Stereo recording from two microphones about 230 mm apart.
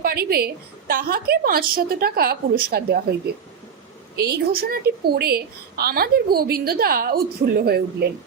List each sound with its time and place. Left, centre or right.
0.0 s a woman's voice: right
4.2 s a woman's voice: right